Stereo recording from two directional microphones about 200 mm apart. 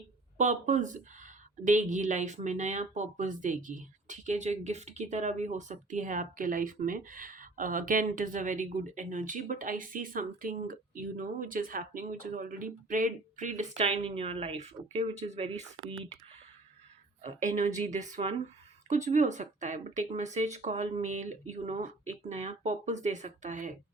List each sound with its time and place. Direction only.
0.3 s speech: 35° right (ahead or behind)
17.2 s speech: 35° right (ahead or behind)